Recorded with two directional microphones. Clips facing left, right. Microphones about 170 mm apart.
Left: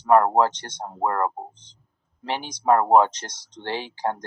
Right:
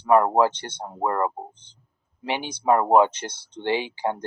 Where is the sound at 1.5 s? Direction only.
60° right (ahead or behind).